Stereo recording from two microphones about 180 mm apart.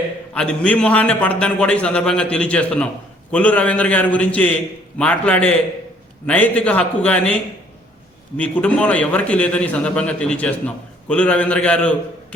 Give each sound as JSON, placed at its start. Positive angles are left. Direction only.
{"t": 0.3, "sound": "a man's voice", "side_deg": 5}
{"t": 8.4, "sound": "a man's voice", "side_deg": 5}